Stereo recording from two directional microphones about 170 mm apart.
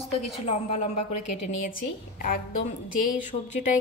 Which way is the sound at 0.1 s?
35° left (ahead or behind).